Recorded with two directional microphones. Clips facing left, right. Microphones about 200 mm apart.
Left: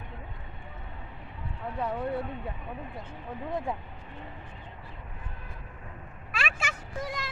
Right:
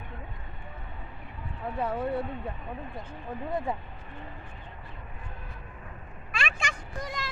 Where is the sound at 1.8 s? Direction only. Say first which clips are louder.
Right 1 dB; centre (ahead or behind).